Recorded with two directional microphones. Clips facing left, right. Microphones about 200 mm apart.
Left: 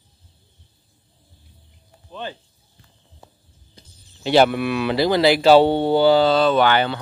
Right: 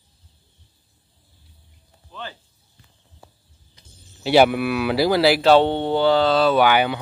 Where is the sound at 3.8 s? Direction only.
30° left (ahead or behind).